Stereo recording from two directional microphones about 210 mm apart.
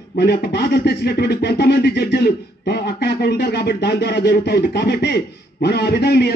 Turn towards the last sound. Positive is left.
turn(degrees=50)  # may be behind; listen again after turning